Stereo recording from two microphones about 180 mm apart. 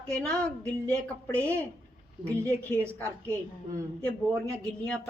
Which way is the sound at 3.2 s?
15° right (ahead or behind).